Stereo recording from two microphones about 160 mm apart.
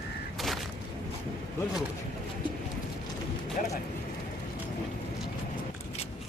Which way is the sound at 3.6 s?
55° left (ahead or behind).